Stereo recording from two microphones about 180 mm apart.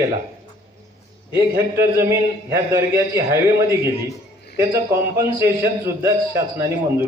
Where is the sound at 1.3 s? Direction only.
15° right (ahead or behind).